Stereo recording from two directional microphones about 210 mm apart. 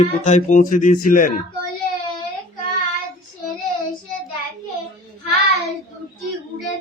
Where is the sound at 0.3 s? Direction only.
35° left (ahead or behind).